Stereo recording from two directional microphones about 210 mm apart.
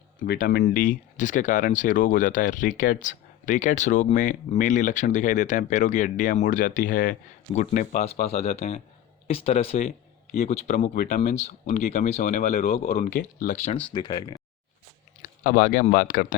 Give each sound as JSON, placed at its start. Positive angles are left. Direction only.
{"t": 0.3, "sound": "speech", "side_deg": 45}
{"t": 10.8, "sound": "speech", "side_deg": 40}
{"t": 13.9, "sound": "speech", "side_deg": 20}
{"t": 15.4, "sound": "speech", "side_deg": 40}